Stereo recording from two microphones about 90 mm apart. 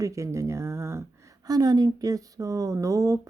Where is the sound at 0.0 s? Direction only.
35° right (ahead or behind).